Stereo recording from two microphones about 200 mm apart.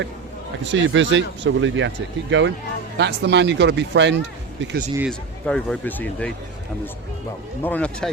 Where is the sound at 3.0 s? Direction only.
55° right (ahead or behind).